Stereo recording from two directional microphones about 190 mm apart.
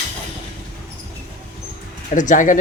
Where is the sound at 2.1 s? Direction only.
40° left (ahead or behind).